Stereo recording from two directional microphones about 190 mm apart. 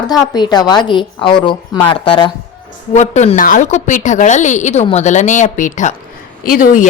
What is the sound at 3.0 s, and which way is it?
Speech, 35° left (ahead or behind).